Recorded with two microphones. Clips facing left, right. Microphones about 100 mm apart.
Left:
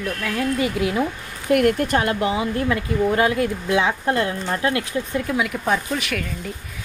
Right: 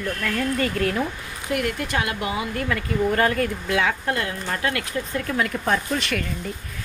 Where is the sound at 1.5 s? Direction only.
50° left (ahead or behind); by 5.2 s 25° left (ahead or behind).